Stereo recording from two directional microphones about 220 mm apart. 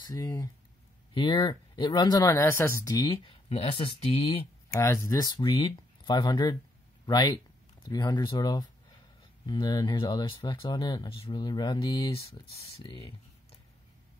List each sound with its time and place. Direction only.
0.0 s speech: 15° left (ahead or behind)
4.7 s speech: 15° left (ahead or behind)